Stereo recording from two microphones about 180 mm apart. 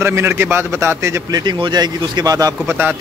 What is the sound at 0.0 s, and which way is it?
Speech, 15° right (ahead or behind).